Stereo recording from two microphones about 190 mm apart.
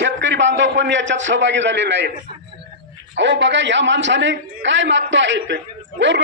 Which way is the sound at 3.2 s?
70° right (ahead or behind).